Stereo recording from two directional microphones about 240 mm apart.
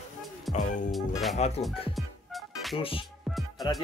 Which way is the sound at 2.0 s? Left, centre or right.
Centre.